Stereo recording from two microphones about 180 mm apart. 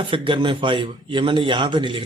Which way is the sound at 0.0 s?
25° right (ahead or behind).